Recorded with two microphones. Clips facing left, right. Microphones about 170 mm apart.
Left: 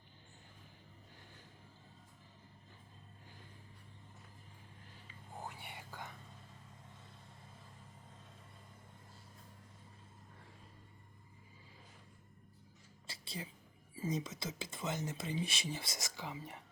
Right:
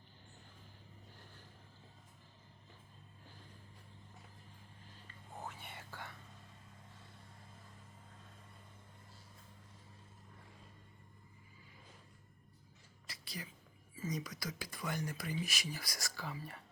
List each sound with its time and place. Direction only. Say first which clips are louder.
5.5 s whispering: even; 15° left (ahead or behind)
13.1 s a sound: left 2 dB; 25° left (ahead or behind)
13.9 s speech: left 3 dB; 30° left (ahead or behind)